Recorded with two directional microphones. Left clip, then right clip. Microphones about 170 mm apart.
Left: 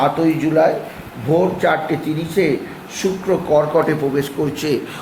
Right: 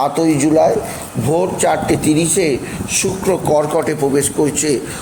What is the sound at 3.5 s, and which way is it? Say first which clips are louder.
Speech: even; 25° right (ahead or behind).